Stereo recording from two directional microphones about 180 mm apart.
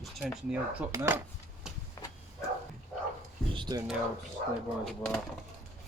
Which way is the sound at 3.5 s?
25° right (ahead or behind).